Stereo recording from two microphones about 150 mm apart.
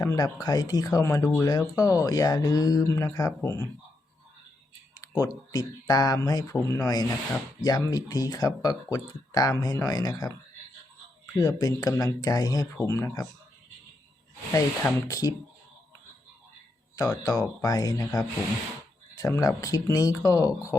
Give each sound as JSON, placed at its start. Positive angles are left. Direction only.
{"t": 0.0, "sound": "speech", "side_deg": 20}
{"t": 4.9, "sound": "speech", "side_deg": 25}
{"t": 11.3, "sound": "speech", "side_deg": 25}
{"t": 15.0, "sound": "speech", "side_deg": 25}
{"t": 16.9, "sound": "speech", "side_deg": 25}